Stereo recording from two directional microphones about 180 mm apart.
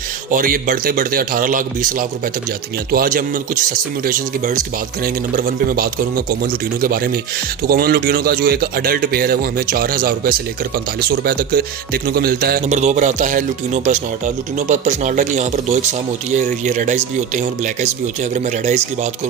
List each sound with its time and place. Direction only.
0.3 s speech: 50° right (ahead or behind)
12.6 s speech: 40° right (ahead or behind)